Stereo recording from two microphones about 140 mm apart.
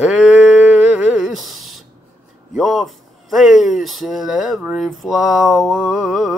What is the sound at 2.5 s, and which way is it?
Speech, centre (ahead or behind).